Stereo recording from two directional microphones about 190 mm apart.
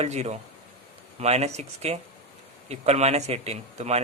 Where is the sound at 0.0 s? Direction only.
35° right (ahead or behind).